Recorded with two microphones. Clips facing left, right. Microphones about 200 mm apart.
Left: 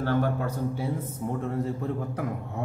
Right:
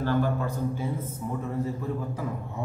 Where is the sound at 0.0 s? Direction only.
60° left (ahead or behind).